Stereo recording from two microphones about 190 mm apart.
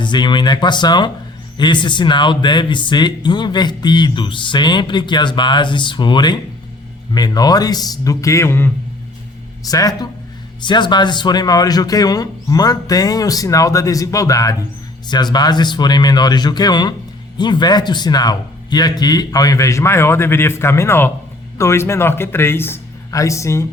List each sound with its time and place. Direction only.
0.0 s speech: 25° left (ahead or behind)